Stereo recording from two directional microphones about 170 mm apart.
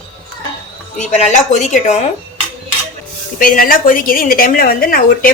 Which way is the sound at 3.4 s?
55° left (ahead or behind).